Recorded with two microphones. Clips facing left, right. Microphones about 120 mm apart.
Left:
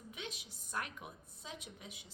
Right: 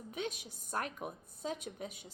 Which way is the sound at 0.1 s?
45° right (ahead or behind).